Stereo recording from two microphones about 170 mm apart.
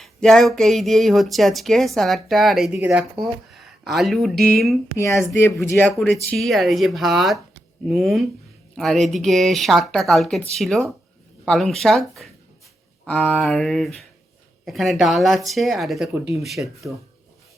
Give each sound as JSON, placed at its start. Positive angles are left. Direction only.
{"t": 0.0, "sound": "speech", "side_deg": 0}
{"t": 4.9, "sound": "speech", "side_deg": 15}
{"t": 6.3, "sound": "speech", "side_deg": 0}